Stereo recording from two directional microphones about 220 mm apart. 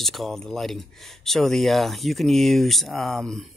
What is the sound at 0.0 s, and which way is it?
Speech, centre (ahead or behind).